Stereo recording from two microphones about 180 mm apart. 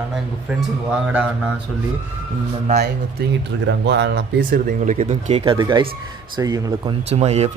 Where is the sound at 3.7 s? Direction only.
75° right (ahead or behind).